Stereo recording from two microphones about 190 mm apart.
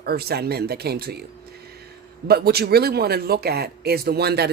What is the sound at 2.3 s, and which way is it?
Speech, 55° right (ahead or behind).